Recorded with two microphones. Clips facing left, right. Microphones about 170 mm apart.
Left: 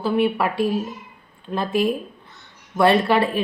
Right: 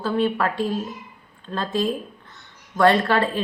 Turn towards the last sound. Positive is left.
turn(degrees=10)  # may be behind; listen again after turning